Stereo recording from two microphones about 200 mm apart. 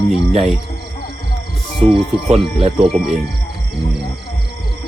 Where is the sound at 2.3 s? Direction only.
30° right (ahead or behind).